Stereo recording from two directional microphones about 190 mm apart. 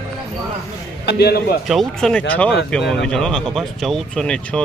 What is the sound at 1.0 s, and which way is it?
Speech, 55° left (ahead or behind).